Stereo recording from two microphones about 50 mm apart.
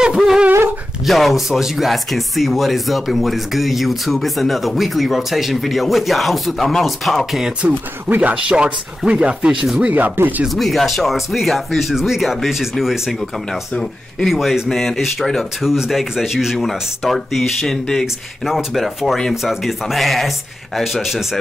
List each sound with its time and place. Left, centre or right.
0.0 s speech: centre
1.0 s speech: centre
7.6 s speech: right
9.8 s speech: right
10.5 s speech: centre
14.3 s speech: centre
18.0 s speech: centre